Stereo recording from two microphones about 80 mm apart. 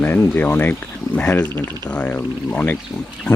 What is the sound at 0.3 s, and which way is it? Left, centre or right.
Speech, left.